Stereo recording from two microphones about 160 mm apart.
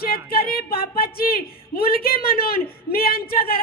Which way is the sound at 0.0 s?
70° left (ahead or behind).